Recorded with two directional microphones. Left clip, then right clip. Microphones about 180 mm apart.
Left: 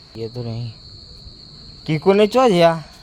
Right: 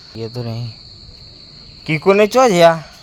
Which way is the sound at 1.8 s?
10° left (ahead or behind).